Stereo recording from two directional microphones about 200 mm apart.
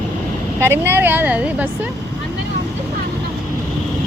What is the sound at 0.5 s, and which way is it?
Speech, 10° right (ahead or behind).